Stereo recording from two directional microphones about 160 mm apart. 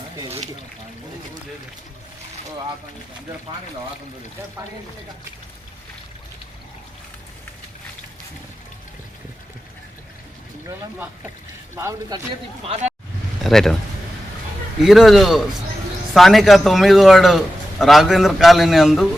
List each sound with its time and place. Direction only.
11.7 s a man's voice: 15° right (ahead or behind)
12.6 s speech: 40° right (ahead or behind)
13.4 s a man's voice: centre (ahead or behind)
14.8 s a man's voice: centre (ahead or behind)